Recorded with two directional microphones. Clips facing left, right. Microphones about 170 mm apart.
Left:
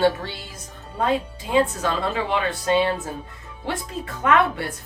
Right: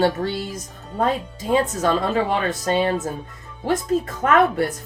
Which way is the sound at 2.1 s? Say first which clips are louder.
Right 3 dB; 40° right (ahead or behind).